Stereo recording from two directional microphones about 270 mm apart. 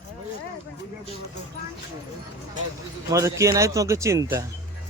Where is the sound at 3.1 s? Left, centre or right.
Centre.